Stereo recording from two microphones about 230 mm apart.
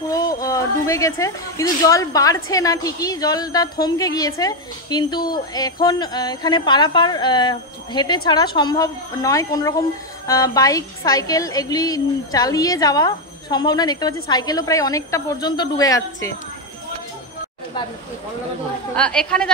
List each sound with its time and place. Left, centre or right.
0.1 s speech: centre
18.9 s a woman's voice: centre